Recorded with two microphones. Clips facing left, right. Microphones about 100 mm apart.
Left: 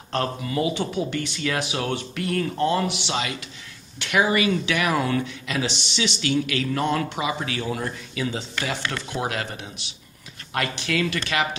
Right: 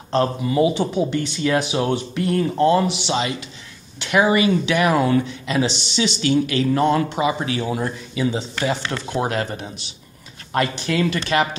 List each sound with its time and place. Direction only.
0.1 s speech: 25° right (ahead or behind)
9.1 s speech: 35° right (ahead or behind)